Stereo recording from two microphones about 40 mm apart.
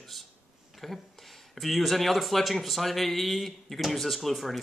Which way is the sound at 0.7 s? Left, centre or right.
Centre.